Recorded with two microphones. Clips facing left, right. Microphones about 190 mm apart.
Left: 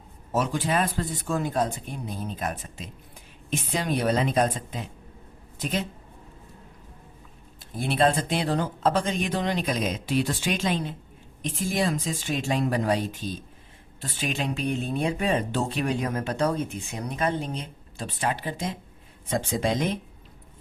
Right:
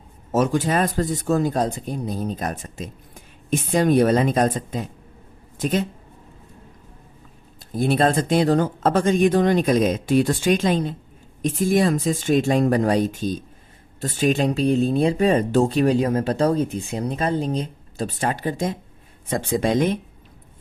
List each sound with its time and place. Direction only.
0.3 s speech: 45° right (ahead or behind)
7.6 s speech: 40° right (ahead or behind)
19.3 s speech: 60° right (ahead or behind)